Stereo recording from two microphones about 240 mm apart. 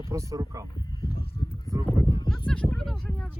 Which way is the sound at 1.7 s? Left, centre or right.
Centre.